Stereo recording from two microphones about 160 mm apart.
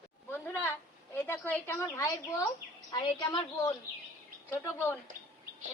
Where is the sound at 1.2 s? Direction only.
10° left (ahead or behind).